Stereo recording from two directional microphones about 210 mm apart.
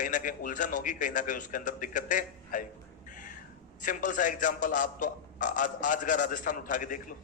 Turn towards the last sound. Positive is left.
turn(degrees=40)  # may be behind; listen again after turning